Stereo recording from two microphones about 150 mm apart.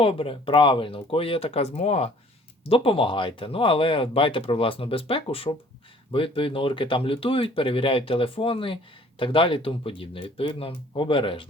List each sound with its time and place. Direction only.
0.0 s speech: 40° left (ahead or behind)